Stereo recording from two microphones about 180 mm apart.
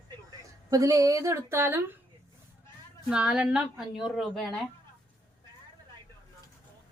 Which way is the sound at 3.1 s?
5° right (ahead or behind).